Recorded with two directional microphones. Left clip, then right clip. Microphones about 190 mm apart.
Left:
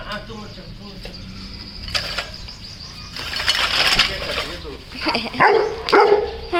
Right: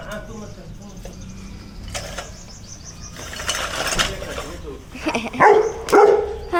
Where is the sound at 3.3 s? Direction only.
15° left (ahead or behind).